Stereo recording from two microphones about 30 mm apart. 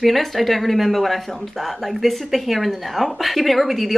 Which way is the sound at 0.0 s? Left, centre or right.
Centre.